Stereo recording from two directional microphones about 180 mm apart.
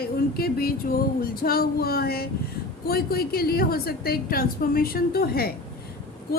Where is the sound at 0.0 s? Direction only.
60° left (ahead or behind).